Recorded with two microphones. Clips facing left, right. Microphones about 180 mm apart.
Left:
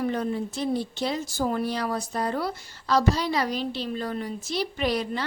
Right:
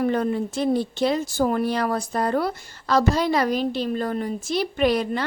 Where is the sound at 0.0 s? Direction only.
60° right (ahead or behind).